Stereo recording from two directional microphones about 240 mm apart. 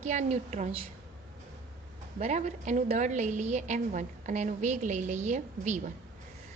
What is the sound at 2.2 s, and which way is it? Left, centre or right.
A woman's voice, right.